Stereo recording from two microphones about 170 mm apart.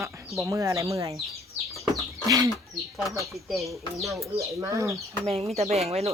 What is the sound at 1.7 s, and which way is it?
Bird, centre (ahead or behind).